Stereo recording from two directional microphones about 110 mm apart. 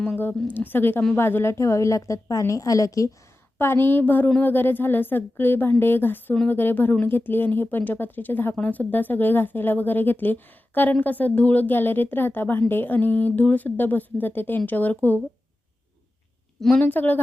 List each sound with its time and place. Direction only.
0.2 s a woman's voice: 15° left (ahead or behind)
3.6 s a woman's voice: 20° left (ahead or behind)
16.7 s speech: 15° left (ahead or behind)